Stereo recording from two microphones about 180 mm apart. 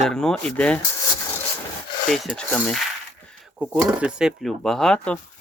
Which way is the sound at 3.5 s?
5° right (ahead or behind).